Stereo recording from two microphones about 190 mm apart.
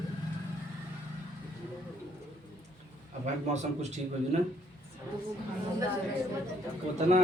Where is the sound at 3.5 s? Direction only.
35° right (ahead or behind).